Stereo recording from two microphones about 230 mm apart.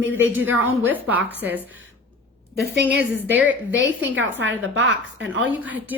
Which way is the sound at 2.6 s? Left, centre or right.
Right.